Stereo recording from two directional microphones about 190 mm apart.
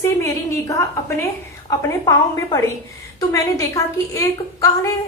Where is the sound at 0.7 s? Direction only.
15° left (ahead or behind).